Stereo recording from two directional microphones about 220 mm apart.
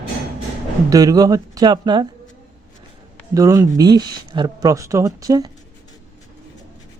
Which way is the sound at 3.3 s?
15° right (ahead or behind).